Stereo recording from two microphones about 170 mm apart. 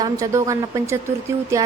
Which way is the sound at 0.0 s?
20° right (ahead or behind).